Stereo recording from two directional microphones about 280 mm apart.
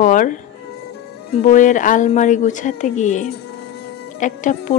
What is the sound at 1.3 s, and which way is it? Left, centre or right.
A woman's voice, left.